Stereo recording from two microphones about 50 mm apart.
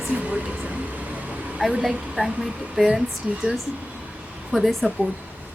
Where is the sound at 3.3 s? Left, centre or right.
Centre.